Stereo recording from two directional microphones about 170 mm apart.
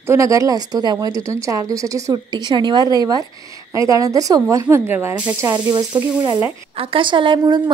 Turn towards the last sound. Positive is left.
turn(degrees=-30)  # may be behind; listen again after turning